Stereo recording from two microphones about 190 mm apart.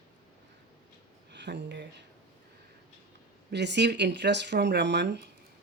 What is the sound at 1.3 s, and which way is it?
Speech, 65° right (ahead or behind).